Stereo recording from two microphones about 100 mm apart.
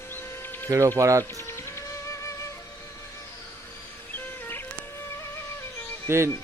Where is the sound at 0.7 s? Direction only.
30° right (ahead or behind).